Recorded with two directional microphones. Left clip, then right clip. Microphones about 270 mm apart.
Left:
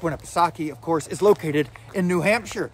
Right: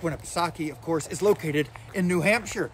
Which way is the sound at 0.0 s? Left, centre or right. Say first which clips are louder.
Left 6 dB; centre.